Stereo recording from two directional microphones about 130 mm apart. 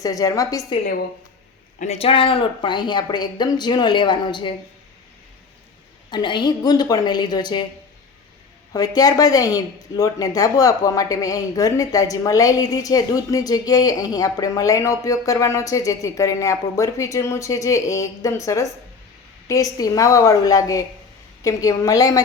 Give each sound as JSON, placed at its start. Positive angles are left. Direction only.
{"t": 0.0, "sound": "speech", "side_deg": 30}
{"t": 1.8, "sound": "speech", "side_deg": 55}
{"t": 6.1, "sound": "speech", "side_deg": 35}
{"t": 8.7, "sound": "speech", "side_deg": 30}